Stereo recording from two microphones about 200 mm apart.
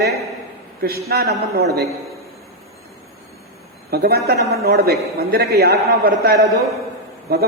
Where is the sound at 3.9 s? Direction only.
50° right (ahead or behind).